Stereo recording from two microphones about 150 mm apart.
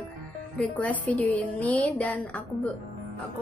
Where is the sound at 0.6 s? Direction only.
10° left (ahead or behind).